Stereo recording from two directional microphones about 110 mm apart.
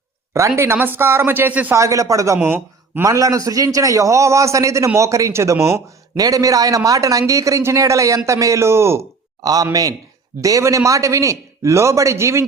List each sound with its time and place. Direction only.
0.3 s a man's voice: 25° right (ahead or behind)
1.7 s a man's voice: 30° right (ahead or behind)
3.1 s a man's voice: 30° right (ahead or behind)